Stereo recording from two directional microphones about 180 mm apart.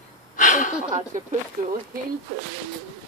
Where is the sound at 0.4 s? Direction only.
45° left (ahead or behind).